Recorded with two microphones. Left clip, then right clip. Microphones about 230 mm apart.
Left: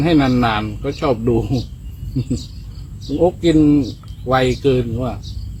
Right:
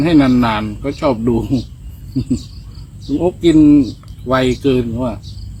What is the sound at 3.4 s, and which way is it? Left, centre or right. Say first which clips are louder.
Speech: right 9 dB; centre.